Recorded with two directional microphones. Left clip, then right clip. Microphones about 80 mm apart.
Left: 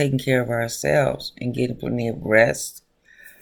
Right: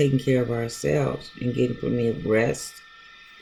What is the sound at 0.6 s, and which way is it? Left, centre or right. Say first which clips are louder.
Speech: left 5 dB; centre.